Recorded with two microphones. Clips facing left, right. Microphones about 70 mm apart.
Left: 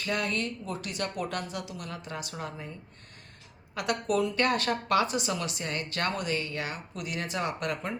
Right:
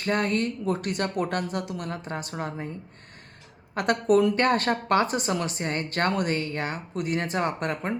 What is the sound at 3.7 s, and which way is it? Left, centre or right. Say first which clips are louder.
Speech: right 7 dB; right.